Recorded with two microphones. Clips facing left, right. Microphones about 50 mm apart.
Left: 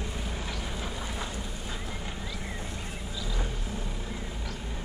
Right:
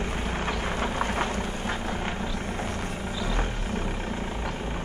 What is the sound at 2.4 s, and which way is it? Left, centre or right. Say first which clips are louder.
Music: right 7 dB; right.